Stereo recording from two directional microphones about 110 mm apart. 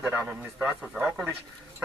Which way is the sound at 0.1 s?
10° right (ahead or behind).